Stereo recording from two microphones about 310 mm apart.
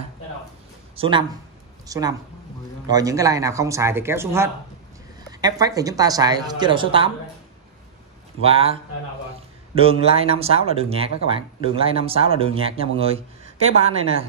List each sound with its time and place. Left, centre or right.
0.9 s a woman's voice: centre
8.4 s speech: centre
9.8 s speech: centre